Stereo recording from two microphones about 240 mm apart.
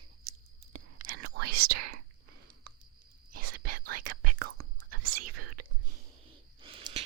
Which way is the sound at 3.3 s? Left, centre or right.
Right.